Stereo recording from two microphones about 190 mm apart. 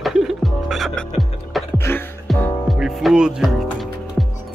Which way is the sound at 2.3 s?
Centre (ahead or behind).